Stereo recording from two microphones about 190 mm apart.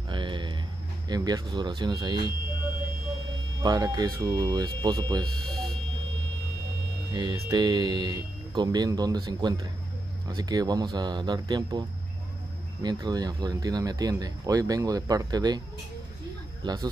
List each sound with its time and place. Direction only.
0.1 s a sound: 25° right (ahead or behind)
1.0 s speech: 20° right (ahead or behind)
3.6 s speech: 20° right (ahead or behind)
5.2 s buzzer: centre (ahead or behind)
7.1 s speech: 20° right (ahead or behind)
12.8 s speech: 20° right (ahead or behind)
16.6 s speech: 20° right (ahead or behind)